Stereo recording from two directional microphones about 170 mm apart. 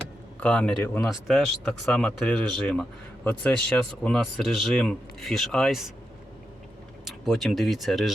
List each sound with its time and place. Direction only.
0.3 s a man's voice: 5° left (ahead or behind)
7.0 s speech: centre (ahead or behind)